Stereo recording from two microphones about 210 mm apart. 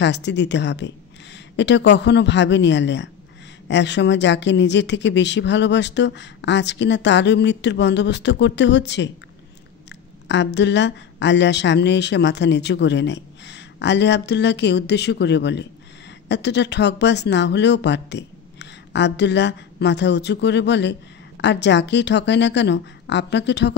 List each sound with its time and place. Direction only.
0.0 s speech: 55° left (ahead or behind)